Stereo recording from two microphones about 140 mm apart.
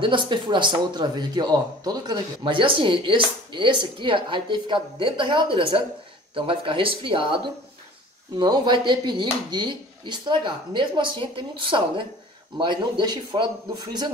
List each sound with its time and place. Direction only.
0.0 s a man's voice: 35° right (ahead or behind)